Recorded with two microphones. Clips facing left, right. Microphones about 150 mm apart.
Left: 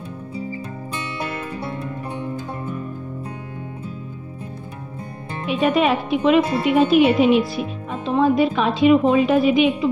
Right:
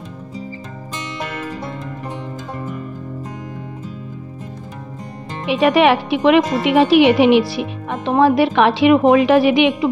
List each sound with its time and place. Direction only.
5.5 s a woman's voice: 80° right